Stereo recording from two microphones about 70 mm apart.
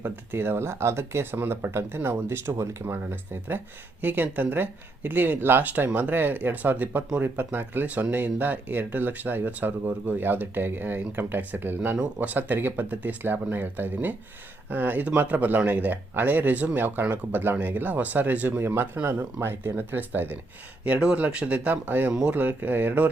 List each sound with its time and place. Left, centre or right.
0.0 s speech: right
2.5 s speech: right
4.0 s speech: right
18.6 s speech: right
22.1 s speech: centre
22.4 s speech: right